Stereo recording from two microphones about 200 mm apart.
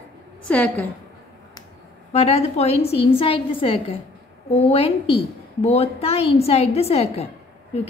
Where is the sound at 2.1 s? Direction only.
30° left (ahead or behind).